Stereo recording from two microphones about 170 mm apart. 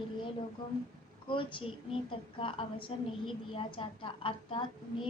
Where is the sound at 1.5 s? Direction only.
35° left (ahead or behind).